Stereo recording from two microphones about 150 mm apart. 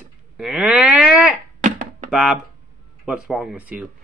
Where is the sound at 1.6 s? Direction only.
60° right (ahead or behind).